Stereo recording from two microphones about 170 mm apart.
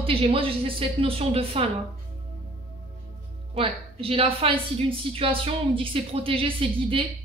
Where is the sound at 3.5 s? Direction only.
35° right (ahead or behind).